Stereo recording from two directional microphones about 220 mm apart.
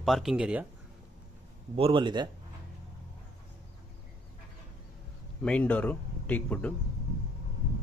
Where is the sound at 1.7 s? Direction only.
25° right (ahead or behind).